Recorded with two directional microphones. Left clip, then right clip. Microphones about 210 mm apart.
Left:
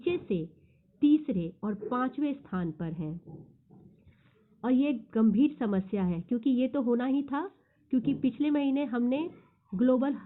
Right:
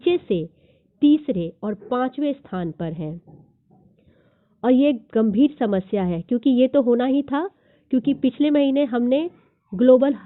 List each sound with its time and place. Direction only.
0.0 s a sound: 45° right (ahead or behind)
0.9 s a woman's voice: 40° right (ahead or behind)
4.6 s a woman's voice: 40° right (ahead or behind)